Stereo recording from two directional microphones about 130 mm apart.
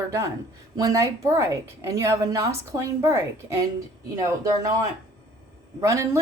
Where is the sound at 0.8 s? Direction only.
25° right (ahead or behind).